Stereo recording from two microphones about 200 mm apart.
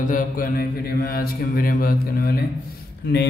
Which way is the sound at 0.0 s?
40° left (ahead or behind).